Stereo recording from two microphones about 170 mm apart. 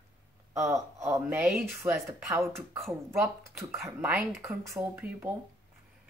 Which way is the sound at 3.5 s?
Centre (ahead or behind).